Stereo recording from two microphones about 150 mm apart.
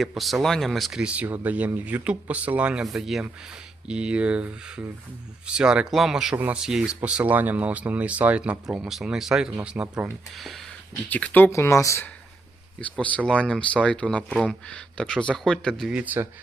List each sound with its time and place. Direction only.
0.0 s speech: centre (ahead or behind)
11.1 s speech: 10° left (ahead or behind)
12.8 s speech: 10° left (ahead or behind); by 16.3 s 15° right (ahead or behind)